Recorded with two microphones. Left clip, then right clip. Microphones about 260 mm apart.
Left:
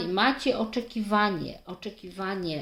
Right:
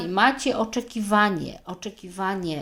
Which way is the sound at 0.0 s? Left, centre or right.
Right.